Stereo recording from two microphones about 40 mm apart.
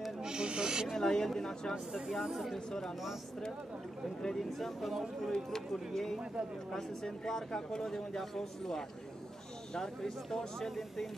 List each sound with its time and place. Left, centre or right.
0.2 s owl: centre
0.9 s speech: centre
1.9 s speech: centre
2.1 s speech: centre
2.5 s speech: centre
4.2 s speech: centre
5.3 s speech: centre